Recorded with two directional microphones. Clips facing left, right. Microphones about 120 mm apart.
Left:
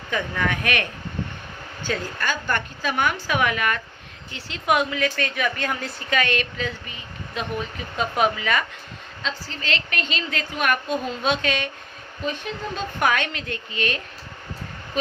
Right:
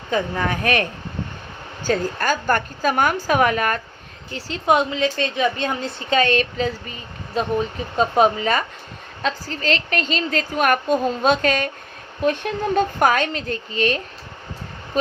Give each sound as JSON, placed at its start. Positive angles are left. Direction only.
{"t": 0.1, "sound": "a woman's voice", "side_deg": -35}
{"t": 12.2, "sound": "speech", "side_deg": -55}
{"t": 13.0, "sound": "a woman's voice", "side_deg": -35}